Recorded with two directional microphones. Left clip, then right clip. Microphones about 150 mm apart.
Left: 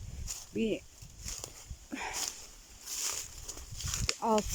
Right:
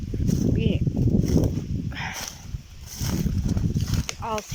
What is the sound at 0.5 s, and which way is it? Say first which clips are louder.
Speech: right 5 dB; 20° left (ahead or behind).